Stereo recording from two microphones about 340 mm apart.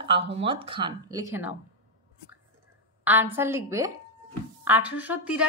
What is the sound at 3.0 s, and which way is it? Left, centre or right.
A woman's voice, centre.